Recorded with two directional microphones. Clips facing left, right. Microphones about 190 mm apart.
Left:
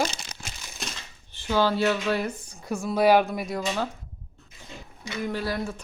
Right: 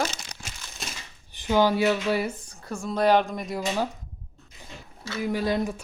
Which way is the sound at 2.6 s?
10° left (ahead or behind).